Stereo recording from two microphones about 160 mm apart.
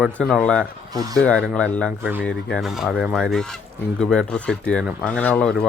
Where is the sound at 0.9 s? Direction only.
25° right (ahead or behind).